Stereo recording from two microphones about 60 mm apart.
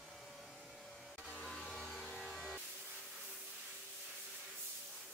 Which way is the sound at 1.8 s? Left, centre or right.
Centre.